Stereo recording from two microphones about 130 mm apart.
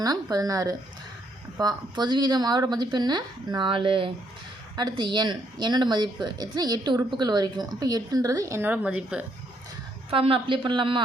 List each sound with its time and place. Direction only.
0.0 s a woman's voice: 30° right (ahead or behind); by 9.2 s 10° right (ahead or behind)
10.1 s a woman's voice: 45° right (ahead or behind)